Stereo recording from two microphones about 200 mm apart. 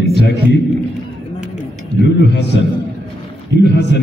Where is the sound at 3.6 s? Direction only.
55° left (ahead or behind).